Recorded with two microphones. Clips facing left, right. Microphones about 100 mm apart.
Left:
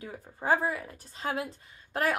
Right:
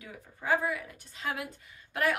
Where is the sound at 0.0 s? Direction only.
35° left (ahead or behind).